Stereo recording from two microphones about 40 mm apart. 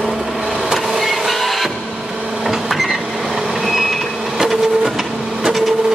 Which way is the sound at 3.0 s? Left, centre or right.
Centre.